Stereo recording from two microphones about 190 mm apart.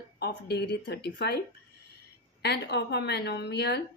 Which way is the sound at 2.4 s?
60° left (ahead or behind).